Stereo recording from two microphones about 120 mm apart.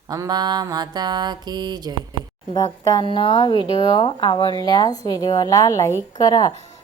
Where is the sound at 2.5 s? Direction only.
30° left (ahead or behind).